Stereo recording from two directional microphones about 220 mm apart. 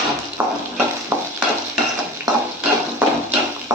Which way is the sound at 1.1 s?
10° right (ahead or behind).